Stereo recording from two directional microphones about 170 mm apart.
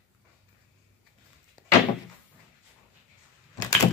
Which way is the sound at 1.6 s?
5° left (ahead or behind).